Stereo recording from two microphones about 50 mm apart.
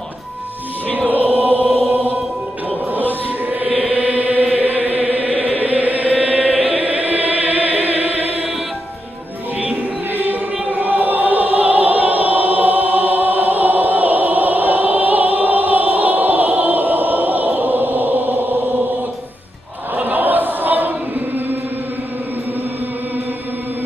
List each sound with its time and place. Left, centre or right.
0.9 s choir: right
2.9 s chant: right
9.6 s choir: right
20.0 s choir: right